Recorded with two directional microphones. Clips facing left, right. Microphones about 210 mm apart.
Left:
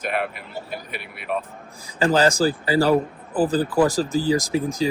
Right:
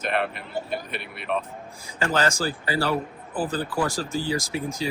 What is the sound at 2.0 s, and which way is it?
Speech, 35° left (ahead or behind).